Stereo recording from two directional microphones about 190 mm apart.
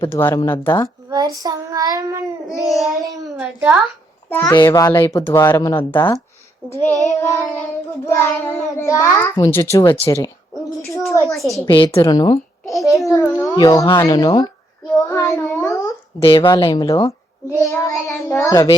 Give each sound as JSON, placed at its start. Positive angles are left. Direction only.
{"t": 0.1, "sound": "a child's voice", "side_deg": 10}
{"t": 1.1, "sound": "child singing", "side_deg": -20}
{"t": 2.6, "sound": "a woman's voice", "side_deg": 0}
{"t": 4.3, "sound": "a child's voice", "side_deg": 10}
{"t": 5.9, "sound": "a child's voice", "side_deg": 20}
{"t": 10.5, "sound": "speech", "side_deg": 0}
{"t": 11.7, "sound": "speech", "side_deg": 25}
{"t": 12.6, "sound": "babbling", "side_deg": 0}
{"t": 12.9, "sound": "a child's voice", "side_deg": 15}
{"t": 14.9, "sound": "child singing", "side_deg": 15}
{"t": 16.2, "sound": "a child's voice", "side_deg": 25}